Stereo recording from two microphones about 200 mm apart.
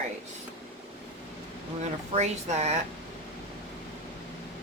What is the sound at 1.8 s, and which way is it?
Speech, 35° right (ahead or behind).